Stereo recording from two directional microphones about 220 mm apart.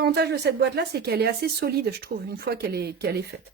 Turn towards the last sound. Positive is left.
turn(degrees=-50)  # may be behind; listen again after turning